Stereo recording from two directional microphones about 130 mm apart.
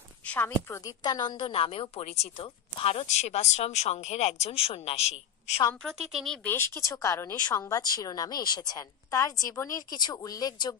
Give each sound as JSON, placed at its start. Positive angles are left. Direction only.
{"t": 0.2, "sound": "a woman's voice", "side_deg": 10}
{"t": 0.7, "sound": "a woman's voice", "side_deg": 25}
{"t": 5.8, "sound": "a woman's voice", "side_deg": 5}
{"t": 6.5, "sound": "a woman's voice", "side_deg": 20}